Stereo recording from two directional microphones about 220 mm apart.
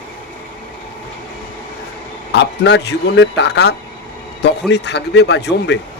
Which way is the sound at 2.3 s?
50° left (ahead or behind).